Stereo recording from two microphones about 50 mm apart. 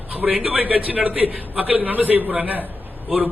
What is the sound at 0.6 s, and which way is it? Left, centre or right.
A man's voice, right.